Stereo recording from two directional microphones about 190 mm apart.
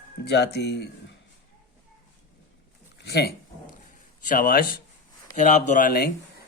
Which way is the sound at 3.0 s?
55° left (ahead or behind).